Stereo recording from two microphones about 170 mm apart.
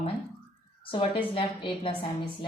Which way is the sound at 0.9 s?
35° left (ahead or behind).